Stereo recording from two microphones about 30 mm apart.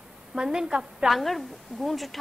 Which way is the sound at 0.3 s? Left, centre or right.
Centre.